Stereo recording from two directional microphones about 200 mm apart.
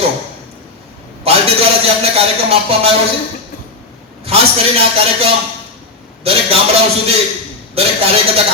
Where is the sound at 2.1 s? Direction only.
30° right (ahead or behind).